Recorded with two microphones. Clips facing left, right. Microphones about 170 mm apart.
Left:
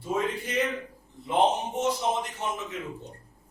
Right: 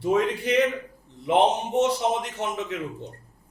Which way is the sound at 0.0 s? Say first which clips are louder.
Right 6 dB; 80° right.